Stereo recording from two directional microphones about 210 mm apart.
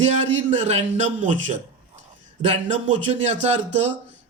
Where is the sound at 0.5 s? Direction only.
30° right (ahead or behind).